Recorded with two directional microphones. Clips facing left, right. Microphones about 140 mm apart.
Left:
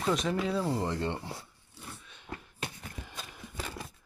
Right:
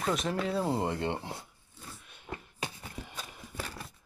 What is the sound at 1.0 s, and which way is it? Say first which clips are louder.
Speech: right 1 dB; 15° right (ahead or behind).